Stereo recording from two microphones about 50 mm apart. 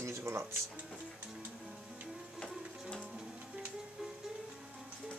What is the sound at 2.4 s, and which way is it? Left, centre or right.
Music, centre.